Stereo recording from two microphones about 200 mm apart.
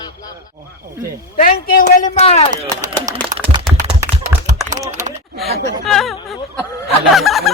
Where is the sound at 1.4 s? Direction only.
45° left (ahead or behind).